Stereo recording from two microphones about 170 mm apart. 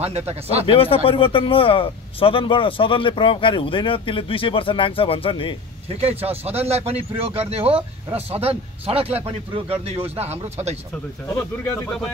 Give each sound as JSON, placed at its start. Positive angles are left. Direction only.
{"t": 0.3, "sound": "speech", "side_deg": -35}
{"t": 0.7, "sound": "speech", "side_deg": 35}
{"t": 5.9, "sound": "speech", "side_deg": -35}